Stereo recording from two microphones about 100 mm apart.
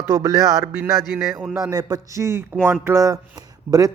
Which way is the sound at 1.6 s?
35° right (ahead or behind).